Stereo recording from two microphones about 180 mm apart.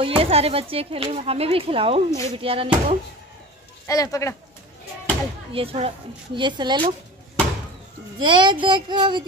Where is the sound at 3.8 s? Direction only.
20° left (ahead or behind).